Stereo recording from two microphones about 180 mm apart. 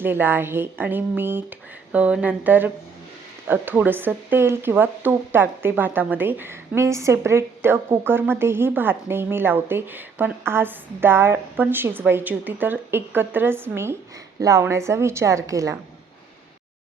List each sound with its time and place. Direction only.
0.0 s speech: 10° right (ahead or behind)